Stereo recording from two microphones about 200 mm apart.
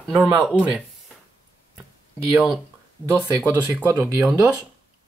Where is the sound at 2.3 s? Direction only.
Centre (ahead or behind).